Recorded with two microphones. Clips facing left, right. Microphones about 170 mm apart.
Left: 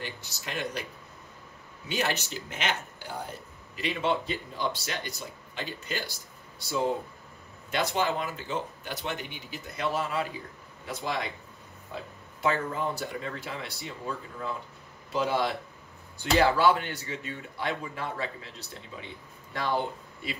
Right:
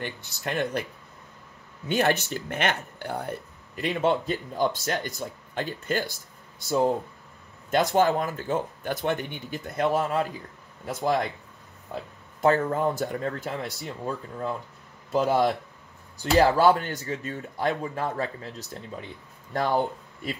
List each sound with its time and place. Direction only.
0.0 s speech: 55° right (ahead or behind)
1.9 s speech: 55° right (ahead or behind)
7.7 s speech: 45° right (ahead or behind)
12.4 s speech: 45° right (ahead or behind)